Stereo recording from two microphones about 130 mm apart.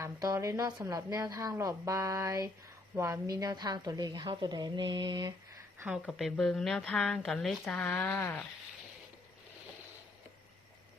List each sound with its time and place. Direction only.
0.0 s a woman's voice: 25° right (ahead or behind)
6.1 s speech: centre (ahead or behind)